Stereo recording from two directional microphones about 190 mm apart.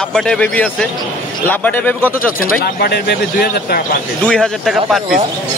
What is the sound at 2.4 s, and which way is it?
Speech, 55° left (ahead or behind).